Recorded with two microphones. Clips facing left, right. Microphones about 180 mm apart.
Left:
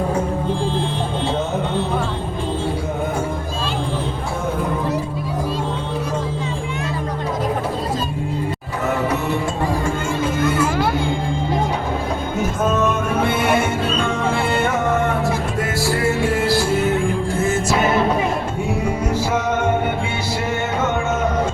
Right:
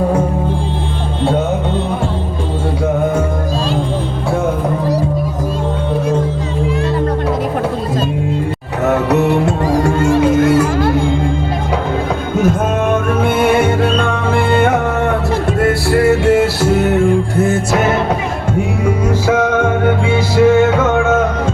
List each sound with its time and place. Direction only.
8.8 s music: 70° right (ahead or behind)
12.7 s music: 55° right (ahead or behind)
19.3 s music: 90° right